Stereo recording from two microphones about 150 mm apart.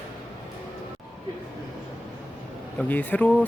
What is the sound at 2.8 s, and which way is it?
Speech, 10° left (ahead or behind).